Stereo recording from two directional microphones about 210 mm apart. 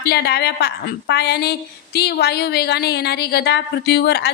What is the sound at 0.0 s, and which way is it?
A woman's voice, 50° left (ahead or behind).